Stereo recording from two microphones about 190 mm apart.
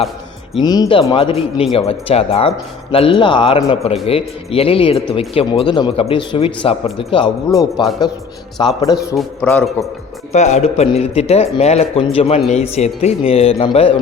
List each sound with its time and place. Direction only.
0.6 s a man's voice: 20° left (ahead or behind)
9.1 s a man's voice: 10° left (ahead or behind)
10.3 s a man's voice: 35° left (ahead or behind)